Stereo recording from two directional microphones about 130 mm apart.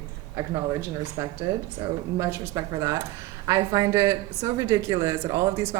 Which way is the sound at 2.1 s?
25° right (ahead or behind).